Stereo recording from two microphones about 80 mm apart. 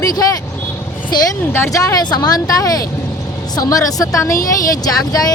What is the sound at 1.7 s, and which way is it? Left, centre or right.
Speech, left.